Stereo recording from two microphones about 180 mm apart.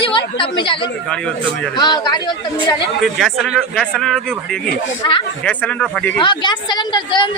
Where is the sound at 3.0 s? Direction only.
Centre (ahead or behind).